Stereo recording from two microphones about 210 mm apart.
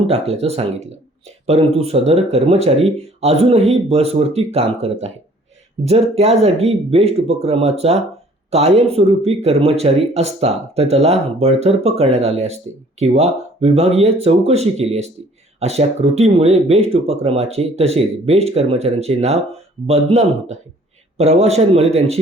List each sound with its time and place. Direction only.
0.1 s speech: 30° right (ahead or behind)